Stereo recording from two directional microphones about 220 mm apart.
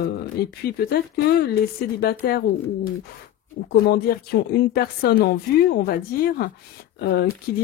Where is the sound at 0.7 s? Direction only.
45° left (ahead or behind).